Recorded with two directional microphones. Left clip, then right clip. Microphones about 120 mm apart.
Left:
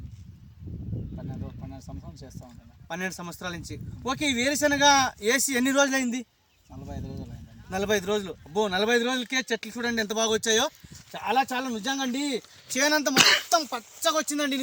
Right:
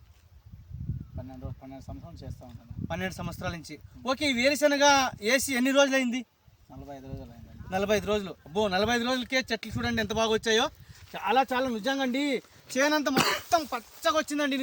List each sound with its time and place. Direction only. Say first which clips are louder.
2.8 s speech: left 1 dB; 20° right (ahead or behind)
6.8 s speech: left 1 dB; 5° left (ahead or behind)
7.7 s speech: left 1 dB; 25° right (ahead or behind)
10.2 s speech: left 1 dB; 5° left (ahead or behind)
11.1 s speech: even; 5° right (ahead or behind)
12.7 s speech: left 2 dB; 15° left (ahead or behind)
13.1 s speech: left 7 dB; 5° right (ahead or behind)
13.5 s speech: left 2 dB; 15° left (ahead or behind)